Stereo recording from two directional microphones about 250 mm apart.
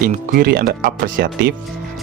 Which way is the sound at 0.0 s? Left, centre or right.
Right.